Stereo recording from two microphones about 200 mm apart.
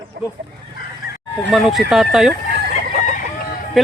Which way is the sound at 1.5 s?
Centre (ahead or behind).